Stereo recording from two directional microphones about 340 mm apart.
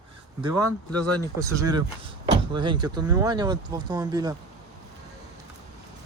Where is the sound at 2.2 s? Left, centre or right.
Centre.